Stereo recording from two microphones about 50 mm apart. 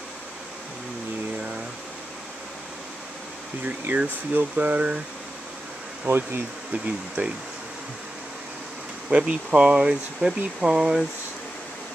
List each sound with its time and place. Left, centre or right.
3.6 s speech: right
6.0 s bee: right
7.2 s speech: right
9.1 s speech: centre